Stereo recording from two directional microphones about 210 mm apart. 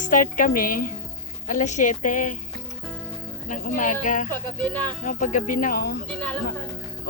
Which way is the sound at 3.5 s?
40° left (ahead or behind).